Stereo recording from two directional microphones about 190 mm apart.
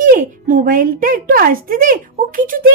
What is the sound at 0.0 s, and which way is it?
Speech, 45° right (ahead or behind).